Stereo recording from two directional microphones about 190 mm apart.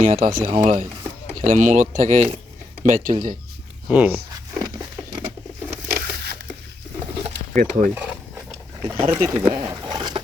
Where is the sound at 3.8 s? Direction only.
5° right (ahead or behind).